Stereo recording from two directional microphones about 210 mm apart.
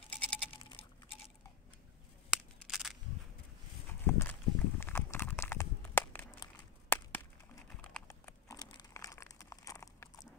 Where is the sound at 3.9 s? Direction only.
10° left (ahead or behind).